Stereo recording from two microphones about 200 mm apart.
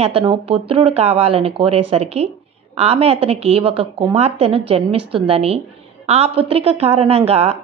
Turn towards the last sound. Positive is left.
turn(degrees=-30)  # may be behind; listen again after turning